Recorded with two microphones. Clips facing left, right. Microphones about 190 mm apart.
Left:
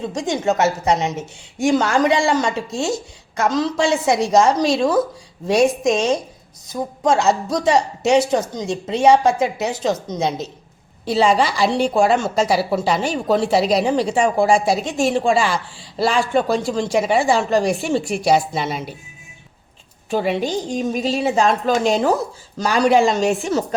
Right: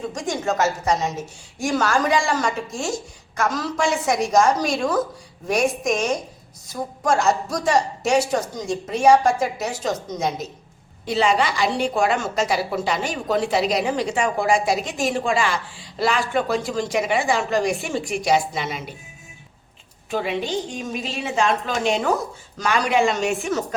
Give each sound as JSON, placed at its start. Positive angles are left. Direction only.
{"t": 0.0, "sound": "a woman's voice", "side_deg": 25}
{"t": 20.1, "sound": "a woman's voice", "side_deg": 35}